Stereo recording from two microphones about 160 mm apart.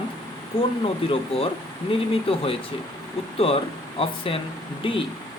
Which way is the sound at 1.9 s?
35° left (ahead or behind).